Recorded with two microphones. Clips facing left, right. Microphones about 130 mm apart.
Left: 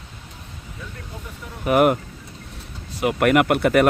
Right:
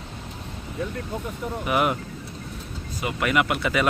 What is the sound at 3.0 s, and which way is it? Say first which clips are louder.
Speech: left 6 dB; 60° left (ahead or behind).